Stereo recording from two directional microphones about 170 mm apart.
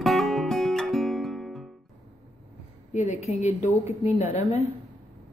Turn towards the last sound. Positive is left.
turn(degrees=40)  # may be behind; listen again after turning